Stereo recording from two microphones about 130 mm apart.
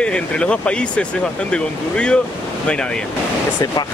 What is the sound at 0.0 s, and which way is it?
Speech, 5° left (ahead or behind).